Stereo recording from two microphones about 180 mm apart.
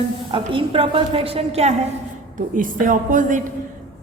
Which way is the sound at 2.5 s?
50° right (ahead or behind).